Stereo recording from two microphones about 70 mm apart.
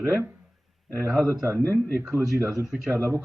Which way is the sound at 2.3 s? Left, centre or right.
Centre.